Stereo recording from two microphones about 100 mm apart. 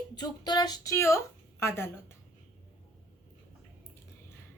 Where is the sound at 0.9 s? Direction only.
30° left (ahead or behind).